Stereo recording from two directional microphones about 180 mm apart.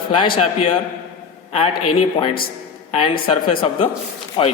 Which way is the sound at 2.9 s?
30° left (ahead or behind).